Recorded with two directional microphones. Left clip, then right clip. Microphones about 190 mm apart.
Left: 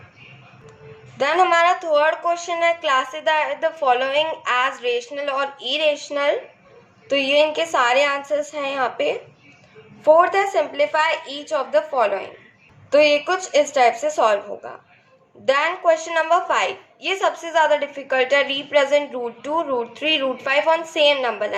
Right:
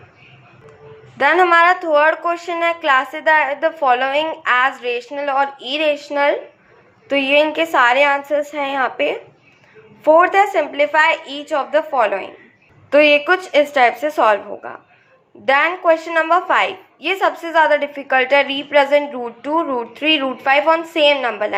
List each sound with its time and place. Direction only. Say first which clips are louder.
1.2 s a woman's voice: right 4 dB; 10° right (ahead or behind)